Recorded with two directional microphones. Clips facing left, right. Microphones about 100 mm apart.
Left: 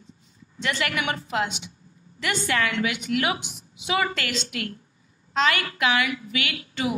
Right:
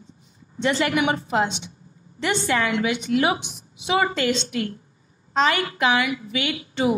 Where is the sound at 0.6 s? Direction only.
25° right (ahead or behind).